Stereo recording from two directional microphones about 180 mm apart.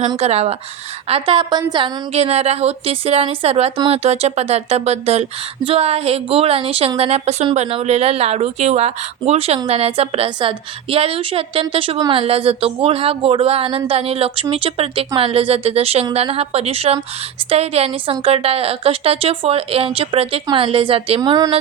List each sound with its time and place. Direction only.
0.2 s a woman's voice: 35° right (ahead or behind)
2.1 s a woman's voice: 35° right (ahead or behind)